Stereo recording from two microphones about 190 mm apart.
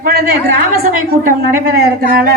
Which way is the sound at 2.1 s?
55° right (ahead or behind).